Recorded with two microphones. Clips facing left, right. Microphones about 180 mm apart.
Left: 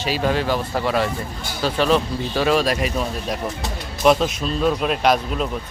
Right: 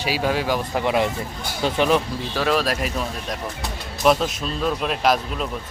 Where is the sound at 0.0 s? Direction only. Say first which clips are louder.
Left 1 dB; 10° right (ahead or behind).